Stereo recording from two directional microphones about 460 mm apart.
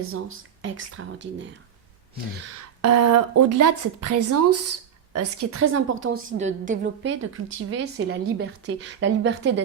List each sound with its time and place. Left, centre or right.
0.6 s a woman's voice: right
2.8 s a woman's voice: right